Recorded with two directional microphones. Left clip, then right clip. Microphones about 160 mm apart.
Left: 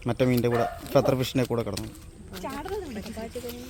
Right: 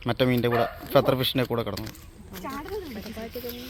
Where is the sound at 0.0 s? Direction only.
5° left (ahead or behind).